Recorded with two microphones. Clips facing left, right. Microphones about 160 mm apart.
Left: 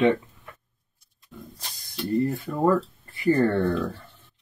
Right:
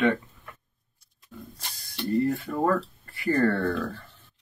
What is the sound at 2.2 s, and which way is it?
Speech, 15° left (ahead or behind).